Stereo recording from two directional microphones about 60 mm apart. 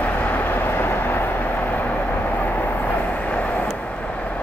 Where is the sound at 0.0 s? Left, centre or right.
Left.